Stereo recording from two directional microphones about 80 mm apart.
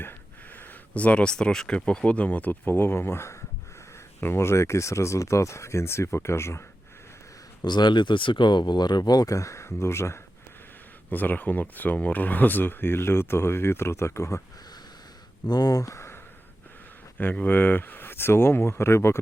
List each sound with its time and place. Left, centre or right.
0.0 s speech: left
7.6 s speech: left
11.1 s speech: left
15.4 s speech: left
17.2 s speech: left